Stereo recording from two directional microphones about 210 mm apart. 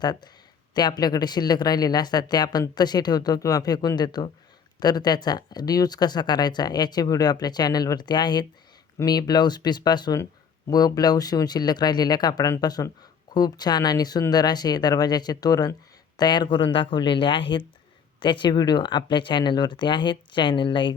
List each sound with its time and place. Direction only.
0.0 s speech: 20° left (ahead or behind)